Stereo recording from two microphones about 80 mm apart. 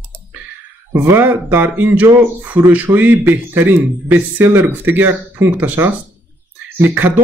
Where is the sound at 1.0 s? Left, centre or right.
Right.